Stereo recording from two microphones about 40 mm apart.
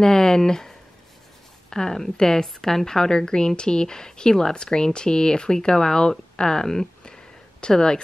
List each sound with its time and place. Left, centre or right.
0.0 s a woman's voice: centre